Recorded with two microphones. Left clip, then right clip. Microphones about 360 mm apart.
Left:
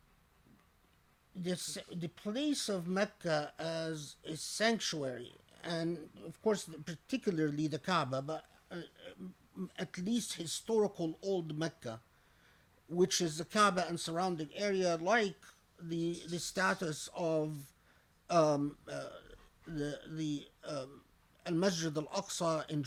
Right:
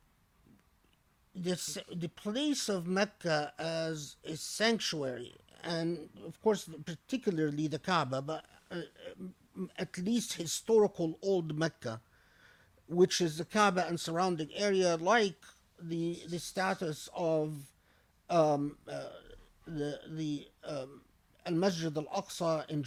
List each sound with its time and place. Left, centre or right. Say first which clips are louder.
1.3 s a man's voice: right 3 dB; right